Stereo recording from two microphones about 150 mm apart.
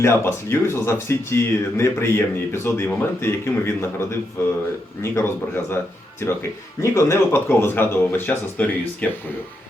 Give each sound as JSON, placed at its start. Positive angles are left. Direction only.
{"t": 0.0, "sound": "speech", "side_deg": 15}
{"t": 5.1, "sound": "speech", "side_deg": 15}